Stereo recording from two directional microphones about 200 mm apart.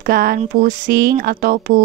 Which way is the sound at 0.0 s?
50° right (ahead or behind).